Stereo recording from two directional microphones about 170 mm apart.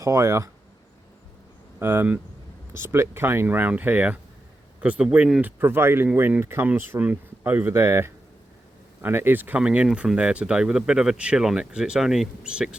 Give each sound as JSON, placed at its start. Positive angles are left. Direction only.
{"t": 0.0, "sound": "speech", "side_deg": -15}
{"t": 1.8, "sound": "speech", "side_deg": -15}